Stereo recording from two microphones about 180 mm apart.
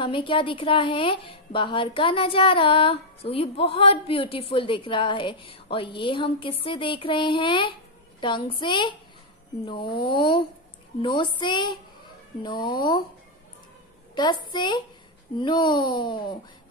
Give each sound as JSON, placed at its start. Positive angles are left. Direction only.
{"t": 0.0, "sound": "speech", "side_deg": 25}
{"t": 14.1, "sound": "speech", "side_deg": 25}